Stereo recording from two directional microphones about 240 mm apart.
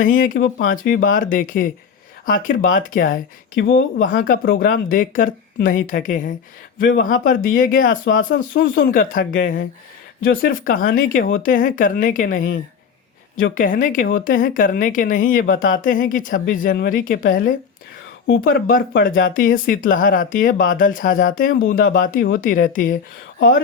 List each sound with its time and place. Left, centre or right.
0.0 s speech: left
3.6 s speech: left
4.0 s speech: left
8.0 s speech: left
13.6 s speech: left